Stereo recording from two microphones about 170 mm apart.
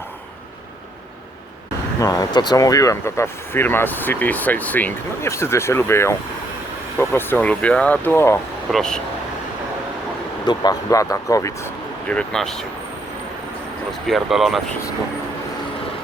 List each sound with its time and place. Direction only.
2.0 s speech: 20° left (ahead or behind)
8.7 s speech: 5° left (ahead or behind)
10.4 s speech: 25° left (ahead or behind)
12.0 s speech: 5° left (ahead or behind)
14.1 s speech: centre (ahead or behind)